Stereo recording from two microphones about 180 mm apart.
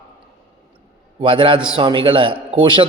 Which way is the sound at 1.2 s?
30° right (ahead or behind).